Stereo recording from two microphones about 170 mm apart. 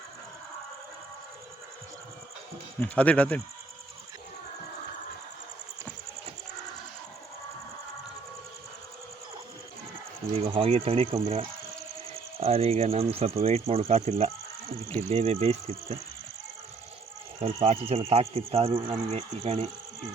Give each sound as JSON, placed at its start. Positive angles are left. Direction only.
{"t": 2.8, "sound": "speech", "side_deg": 10}
{"t": 10.4, "sound": "speech", "side_deg": -30}
{"t": 17.4, "sound": "speech", "side_deg": -35}